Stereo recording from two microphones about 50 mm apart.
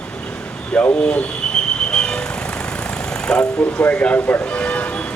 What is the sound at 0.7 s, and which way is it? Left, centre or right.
Speech, left.